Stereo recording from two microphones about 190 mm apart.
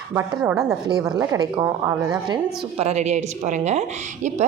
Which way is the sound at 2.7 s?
35° right (ahead or behind).